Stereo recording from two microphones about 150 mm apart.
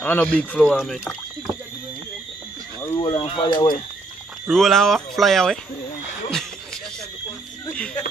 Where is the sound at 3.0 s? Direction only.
35° left (ahead or behind).